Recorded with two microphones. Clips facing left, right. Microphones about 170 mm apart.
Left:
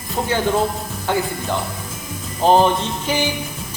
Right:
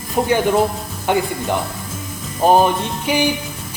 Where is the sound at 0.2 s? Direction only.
15° right (ahead or behind).